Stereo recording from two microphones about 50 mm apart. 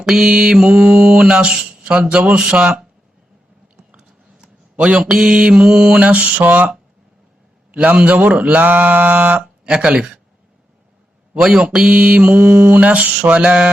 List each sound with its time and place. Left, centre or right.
0.0 s mantra: centre
0.7 s mantra: right
0.9 s speech: right
3.9 s a sound: centre
5.3 s mantra: centre
6.0 s speech: right
6.4 s mantra: right
7.7 s mantra: right
9.7 s mantra: centre
11.6 s speech: right
12.8 s speech: right